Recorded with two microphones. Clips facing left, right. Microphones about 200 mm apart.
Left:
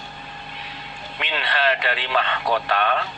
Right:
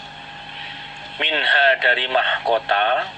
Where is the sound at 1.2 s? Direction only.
25° right (ahead or behind).